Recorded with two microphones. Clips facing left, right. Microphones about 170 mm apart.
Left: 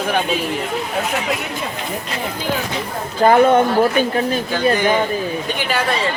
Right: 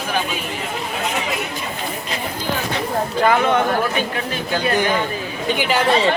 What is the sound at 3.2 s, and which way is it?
Speech, 40° left (ahead or behind).